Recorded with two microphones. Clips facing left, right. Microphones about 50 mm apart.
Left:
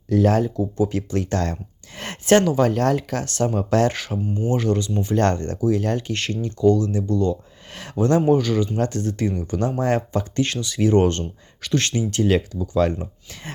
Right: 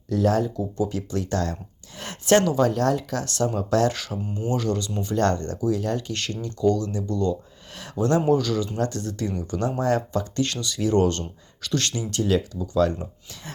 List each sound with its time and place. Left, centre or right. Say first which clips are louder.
0.1 s speech: left 3 dB; left
12.2 s speech: left 2 dB; left